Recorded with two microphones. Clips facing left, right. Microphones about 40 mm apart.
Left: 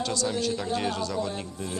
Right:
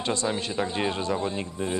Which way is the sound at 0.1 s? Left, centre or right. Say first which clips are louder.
Even; right.